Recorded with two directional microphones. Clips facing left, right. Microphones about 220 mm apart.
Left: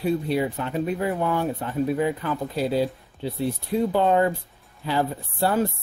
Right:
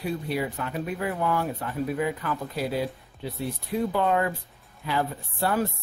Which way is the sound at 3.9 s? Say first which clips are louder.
Left 5 dB; 30° left (ahead or behind).